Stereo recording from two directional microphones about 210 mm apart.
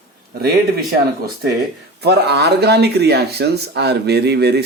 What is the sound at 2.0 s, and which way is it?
Speech, 50° right (ahead or behind).